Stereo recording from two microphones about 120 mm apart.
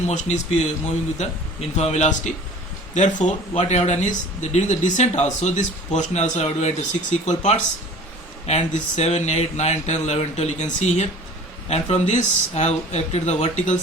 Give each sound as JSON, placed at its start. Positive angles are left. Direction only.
{"t": 0.1, "sound": "speech", "side_deg": 75}
{"t": 1.7, "sound": "speech", "side_deg": 70}